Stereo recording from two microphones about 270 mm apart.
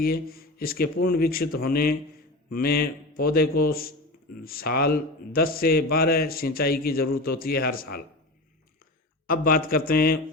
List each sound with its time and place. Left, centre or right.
0.0 s a man's voice: left
9.2 s a man's voice: left